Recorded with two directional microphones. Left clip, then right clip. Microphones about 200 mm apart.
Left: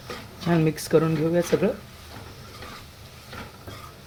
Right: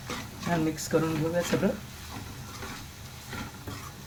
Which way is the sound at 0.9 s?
45° left (ahead or behind).